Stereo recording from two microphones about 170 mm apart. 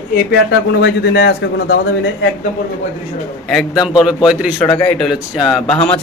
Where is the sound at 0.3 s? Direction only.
70° left (ahead or behind).